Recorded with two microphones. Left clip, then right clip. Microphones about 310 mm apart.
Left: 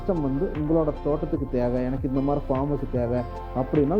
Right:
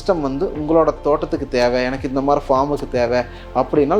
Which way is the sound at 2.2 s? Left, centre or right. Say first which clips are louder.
Right 12 dB; centre.